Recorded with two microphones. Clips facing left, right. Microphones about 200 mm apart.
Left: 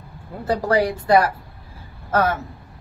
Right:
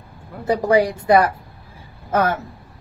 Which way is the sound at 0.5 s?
10° right (ahead or behind).